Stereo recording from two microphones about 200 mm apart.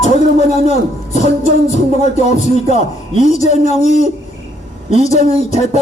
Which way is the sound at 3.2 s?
35° left (ahead or behind).